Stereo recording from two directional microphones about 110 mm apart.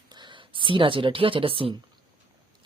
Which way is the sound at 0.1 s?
45° right (ahead or behind).